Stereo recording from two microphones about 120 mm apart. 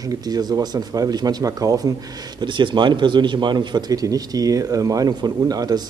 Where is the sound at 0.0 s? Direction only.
30° right (ahead or behind).